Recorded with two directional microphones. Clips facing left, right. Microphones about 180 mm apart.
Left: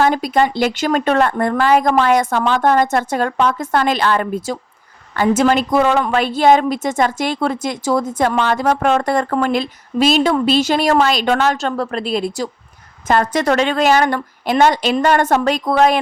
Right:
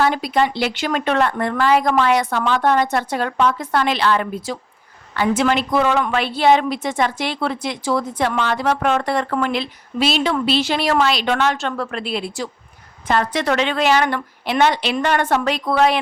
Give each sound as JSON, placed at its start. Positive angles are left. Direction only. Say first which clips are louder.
{"t": 0.0, "sound": "a woman's voice", "louder": "left 3 dB", "side_deg": 45}